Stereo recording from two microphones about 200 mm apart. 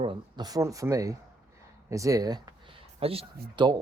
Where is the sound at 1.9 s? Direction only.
15° right (ahead or behind).